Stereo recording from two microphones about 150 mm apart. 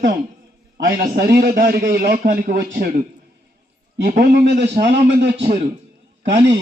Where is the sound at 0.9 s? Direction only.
85° right.